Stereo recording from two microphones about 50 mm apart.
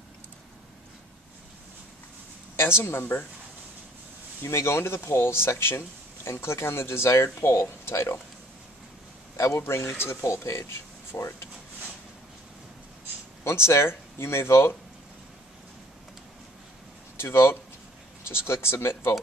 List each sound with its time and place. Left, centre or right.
2.5 s speech: left
4.4 s speech: left
7.9 s speech: left
9.4 s speech: left
13.4 s speech: left
17.2 s speech: left